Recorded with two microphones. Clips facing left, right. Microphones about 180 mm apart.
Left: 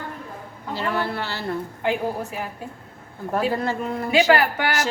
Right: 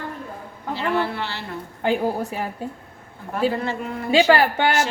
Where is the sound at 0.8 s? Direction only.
40° left (ahead or behind).